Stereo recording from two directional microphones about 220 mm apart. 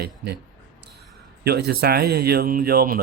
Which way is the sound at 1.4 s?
45° right (ahead or behind).